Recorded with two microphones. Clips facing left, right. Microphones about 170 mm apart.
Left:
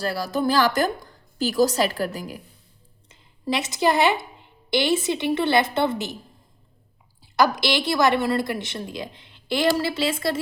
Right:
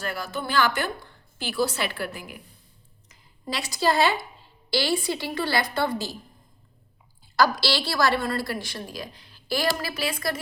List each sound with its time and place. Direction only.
0.0 s a woman's voice: 35° left (ahead or behind)
3.1 s a woman's voice: 25° left (ahead or behind)
7.3 s a woman's voice: 20° left (ahead or behind)